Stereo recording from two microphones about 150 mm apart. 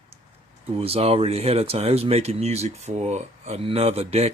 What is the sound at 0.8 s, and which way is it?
Speech, 40° right (ahead or behind).